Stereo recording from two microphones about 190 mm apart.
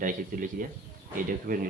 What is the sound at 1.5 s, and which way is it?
Speech, 45° right (ahead or behind).